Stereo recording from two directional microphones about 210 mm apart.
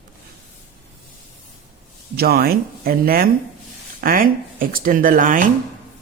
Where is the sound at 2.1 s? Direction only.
50° right (ahead or behind).